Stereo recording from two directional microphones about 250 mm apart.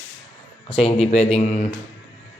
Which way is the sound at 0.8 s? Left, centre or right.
Left.